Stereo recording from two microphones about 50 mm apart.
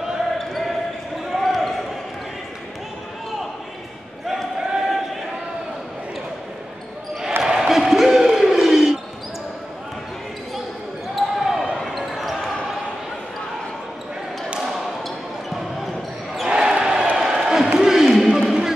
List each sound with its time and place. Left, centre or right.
1.4 s basketball bounce: centre
4.3 s basketball bounce: centre
7.4 s crowd: centre
11.1 s basketball bounce: centre
14.6 s basketball bounce: centre
16.4 s basketball bounce: centre
17.2 s a sound: centre
18.4 s music: centre